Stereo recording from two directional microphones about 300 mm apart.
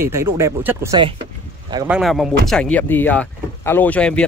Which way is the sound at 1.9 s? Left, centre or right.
Centre.